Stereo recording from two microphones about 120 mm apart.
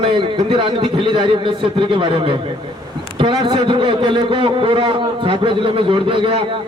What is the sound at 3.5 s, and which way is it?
A man's voice, 45° right (ahead or behind).